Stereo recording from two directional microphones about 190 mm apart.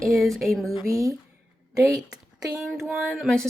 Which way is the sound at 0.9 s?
15° right (ahead or behind).